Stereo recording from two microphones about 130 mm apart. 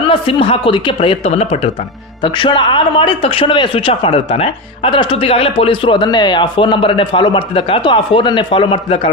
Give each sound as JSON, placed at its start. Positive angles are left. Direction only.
{"t": 0.1, "sound": "speech", "side_deg": 40}
{"t": 2.2, "sound": "a man's voice", "side_deg": 40}